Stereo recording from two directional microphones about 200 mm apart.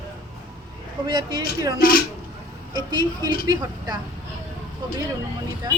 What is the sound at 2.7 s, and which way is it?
A woman's voice, 20° right (ahead or behind).